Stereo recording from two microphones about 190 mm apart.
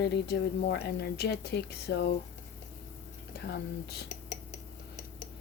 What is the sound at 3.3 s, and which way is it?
Speech, 60° left (ahead or behind).